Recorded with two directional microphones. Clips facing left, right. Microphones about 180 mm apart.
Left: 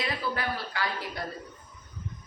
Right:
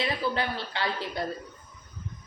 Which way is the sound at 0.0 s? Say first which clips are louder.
Right 3 dB; 25° right (ahead or behind).